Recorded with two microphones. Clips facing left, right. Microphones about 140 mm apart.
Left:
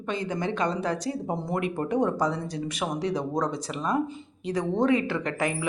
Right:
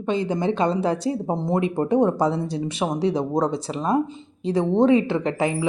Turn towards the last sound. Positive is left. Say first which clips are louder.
# right 5 dB
turn(degrees=-25)  # may be behind; listen again after turning